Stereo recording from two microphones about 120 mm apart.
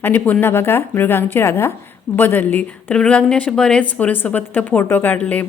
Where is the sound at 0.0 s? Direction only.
15° left (ahead or behind).